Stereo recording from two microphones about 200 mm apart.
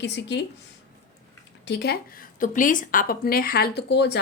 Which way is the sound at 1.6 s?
55° left (ahead or behind).